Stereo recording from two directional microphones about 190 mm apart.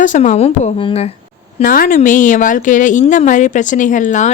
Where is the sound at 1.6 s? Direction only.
45° left (ahead or behind).